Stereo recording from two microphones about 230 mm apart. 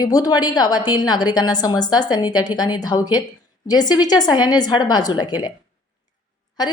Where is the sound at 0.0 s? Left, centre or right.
Centre.